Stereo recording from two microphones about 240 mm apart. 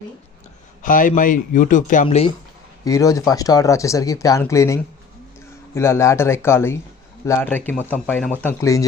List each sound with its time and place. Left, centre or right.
0.8 s speech: left
2.8 s speech: centre